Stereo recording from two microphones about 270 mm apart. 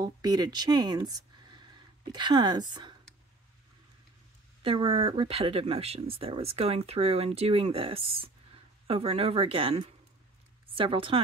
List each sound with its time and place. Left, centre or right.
0.0 s a woman's voice: centre
4.6 s speech: centre